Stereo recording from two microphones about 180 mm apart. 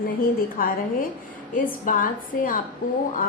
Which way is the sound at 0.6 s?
50° left (ahead or behind).